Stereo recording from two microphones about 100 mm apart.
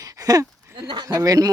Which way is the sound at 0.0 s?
35° right (ahead or behind).